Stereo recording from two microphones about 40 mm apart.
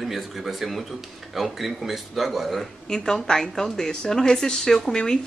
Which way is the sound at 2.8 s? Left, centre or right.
Centre.